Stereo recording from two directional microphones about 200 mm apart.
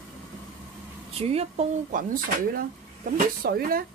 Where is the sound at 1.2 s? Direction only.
30° right (ahead or behind).